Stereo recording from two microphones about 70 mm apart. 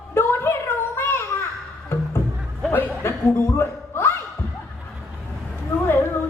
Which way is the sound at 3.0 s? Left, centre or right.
Left.